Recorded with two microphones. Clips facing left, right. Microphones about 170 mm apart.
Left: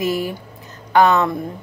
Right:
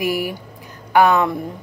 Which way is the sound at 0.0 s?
10° right (ahead or behind).